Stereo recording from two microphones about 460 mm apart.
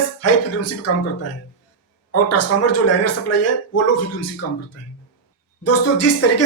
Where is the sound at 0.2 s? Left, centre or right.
Left.